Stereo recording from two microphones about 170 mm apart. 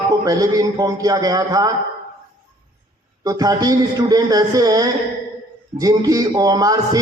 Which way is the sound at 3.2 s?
20° right (ahead or behind).